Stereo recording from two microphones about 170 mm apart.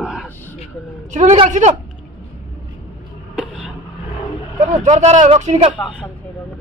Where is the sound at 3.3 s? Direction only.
5° right (ahead or behind).